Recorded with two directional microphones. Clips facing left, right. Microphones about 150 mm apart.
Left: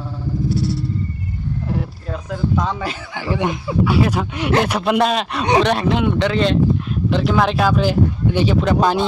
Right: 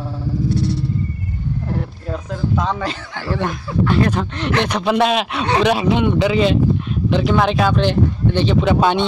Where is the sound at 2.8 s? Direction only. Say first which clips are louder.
Right 1 dB; 10° left (ahead or behind).